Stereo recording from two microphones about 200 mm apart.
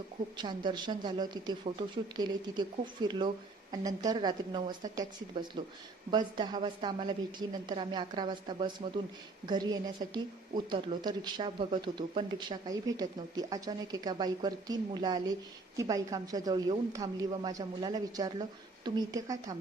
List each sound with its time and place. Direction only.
0.3 s speech: 20° right (ahead or behind)